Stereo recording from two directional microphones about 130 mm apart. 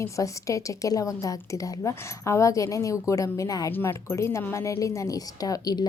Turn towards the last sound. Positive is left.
turn(degrees=30)  # may be behind; listen again after turning